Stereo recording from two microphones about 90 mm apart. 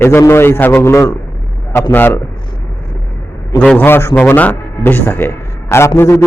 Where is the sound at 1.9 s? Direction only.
20° left (ahead or behind).